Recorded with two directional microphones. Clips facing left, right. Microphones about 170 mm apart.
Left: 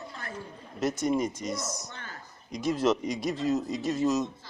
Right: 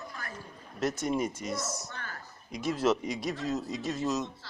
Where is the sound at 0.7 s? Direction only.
Centre (ahead or behind).